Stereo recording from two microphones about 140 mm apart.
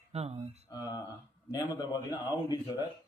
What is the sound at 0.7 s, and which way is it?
A man's voice, 25° left (ahead or behind).